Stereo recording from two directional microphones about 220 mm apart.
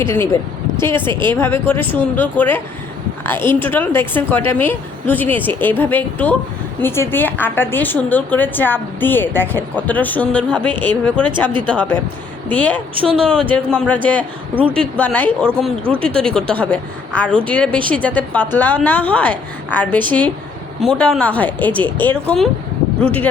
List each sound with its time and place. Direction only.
0.0 s a woman's voice: 10° left (ahead or behind)
11.4 s speech: 20° right (ahead or behind)
11.7 s a woman's voice: 5° left (ahead or behind)
13.0 s speech: 25° right (ahead or behind)
13.5 s a woman's voice: 5° left (ahead or behind)
15.4 s speech: 10° right (ahead or behind)
16.2 s a woman's voice: 5° left (ahead or behind)